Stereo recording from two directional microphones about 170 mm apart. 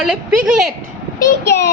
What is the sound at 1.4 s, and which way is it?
Child singing, 80° left.